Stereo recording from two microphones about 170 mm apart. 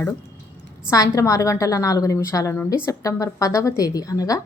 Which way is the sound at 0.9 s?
20° left (ahead or behind).